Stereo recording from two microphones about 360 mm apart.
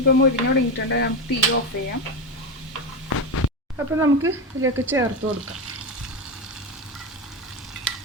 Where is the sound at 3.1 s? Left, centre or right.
Left.